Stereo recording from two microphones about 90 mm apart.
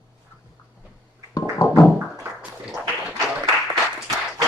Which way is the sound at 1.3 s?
45° left (ahead or behind).